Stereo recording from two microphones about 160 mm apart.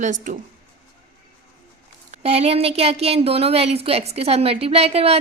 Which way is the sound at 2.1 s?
40° right (ahead or behind).